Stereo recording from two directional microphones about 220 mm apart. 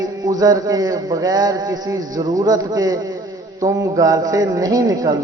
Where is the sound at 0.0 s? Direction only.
15° right (ahead or behind).